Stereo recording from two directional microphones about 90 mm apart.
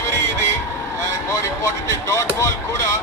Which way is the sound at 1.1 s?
35° left (ahead or behind).